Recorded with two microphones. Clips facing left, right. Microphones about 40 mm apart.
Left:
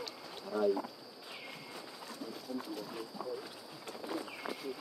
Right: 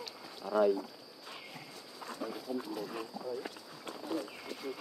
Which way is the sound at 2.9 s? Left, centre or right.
Right.